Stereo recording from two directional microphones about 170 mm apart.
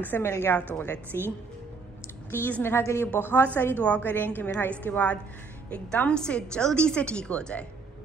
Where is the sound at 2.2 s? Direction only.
10° left (ahead or behind).